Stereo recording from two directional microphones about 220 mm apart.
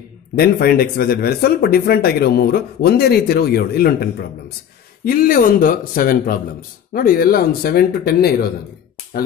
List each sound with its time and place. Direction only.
0.4 s speech: 45° left (ahead or behind)